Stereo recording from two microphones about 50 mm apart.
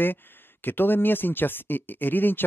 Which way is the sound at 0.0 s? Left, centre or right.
Left.